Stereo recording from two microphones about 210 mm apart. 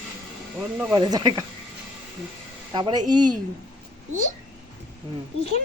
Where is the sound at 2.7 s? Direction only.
20° right (ahead or behind).